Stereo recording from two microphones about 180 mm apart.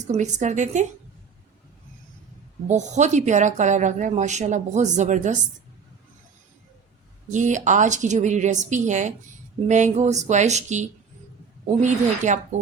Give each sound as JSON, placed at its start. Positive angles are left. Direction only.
{"t": 0.0, "sound": "speech", "side_deg": -40}
{"t": 2.6, "sound": "speech", "side_deg": -40}
{"t": 7.3, "sound": "a woman's voice", "side_deg": -45}